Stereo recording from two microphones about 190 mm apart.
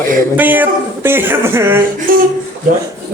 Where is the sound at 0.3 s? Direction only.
10° right (ahead or behind).